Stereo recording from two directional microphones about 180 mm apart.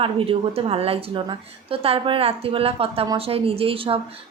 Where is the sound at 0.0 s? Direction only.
30° right (ahead or behind).